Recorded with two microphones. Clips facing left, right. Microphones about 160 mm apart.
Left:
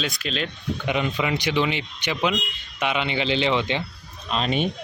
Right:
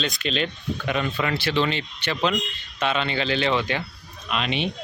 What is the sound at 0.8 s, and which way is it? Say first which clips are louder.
Speech: left 1 dB; 15° left (ahead or behind).